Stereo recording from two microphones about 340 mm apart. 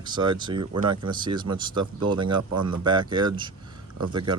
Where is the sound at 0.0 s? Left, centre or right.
Centre.